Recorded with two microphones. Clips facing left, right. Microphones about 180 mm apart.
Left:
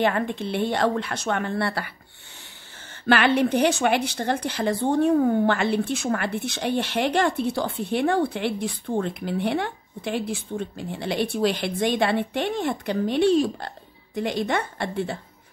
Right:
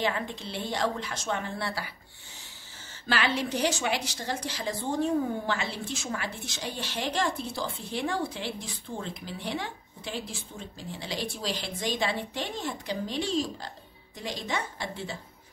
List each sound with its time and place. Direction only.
0.0 s a woman's voice: 60° left (ahead or behind)
3.1 s a woman's voice: 60° left (ahead or behind)